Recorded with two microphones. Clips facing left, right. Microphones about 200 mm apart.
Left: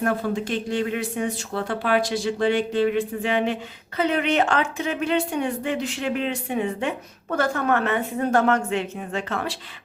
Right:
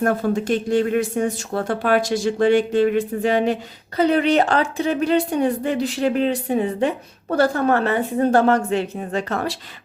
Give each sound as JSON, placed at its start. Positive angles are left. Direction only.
{"t": 0.0, "sound": "speech", "side_deg": -45}